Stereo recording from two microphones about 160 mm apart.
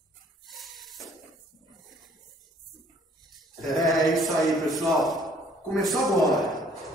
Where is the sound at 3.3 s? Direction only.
Centre (ahead or behind).